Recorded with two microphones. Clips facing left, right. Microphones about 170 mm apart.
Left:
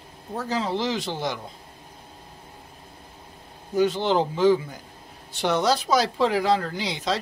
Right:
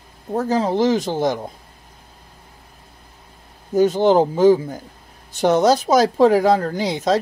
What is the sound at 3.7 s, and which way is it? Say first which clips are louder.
Speech: right 7 dB; 45° right (ahead or behind).